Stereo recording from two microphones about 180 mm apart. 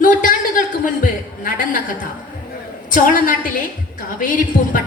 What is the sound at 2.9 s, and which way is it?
A woman's voice, 50° left (ahead or behind).